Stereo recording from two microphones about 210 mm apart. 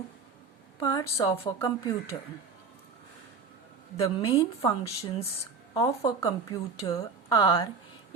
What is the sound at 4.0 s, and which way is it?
A woman's voice, 15° left (ahead or behind).